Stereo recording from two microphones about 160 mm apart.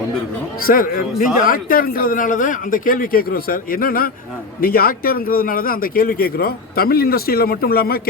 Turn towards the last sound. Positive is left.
turn(degrees=70)  # may be behind; listen again after turning